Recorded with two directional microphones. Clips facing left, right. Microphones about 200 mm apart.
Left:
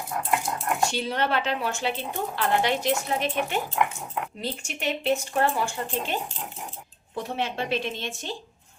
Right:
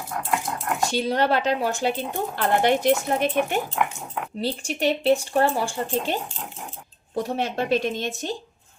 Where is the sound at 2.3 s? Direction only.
55° right (ahead or behind).